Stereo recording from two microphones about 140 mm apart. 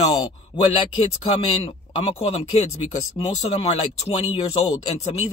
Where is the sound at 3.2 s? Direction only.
40° left (ahead or behind).